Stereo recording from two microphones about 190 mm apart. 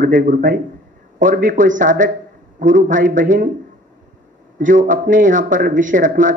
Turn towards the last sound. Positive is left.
turn(degrees=-45)  # may be behind; listen again after turning